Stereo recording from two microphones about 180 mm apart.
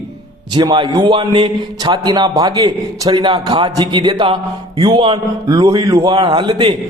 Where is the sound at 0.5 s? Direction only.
25° right (ahead or behind).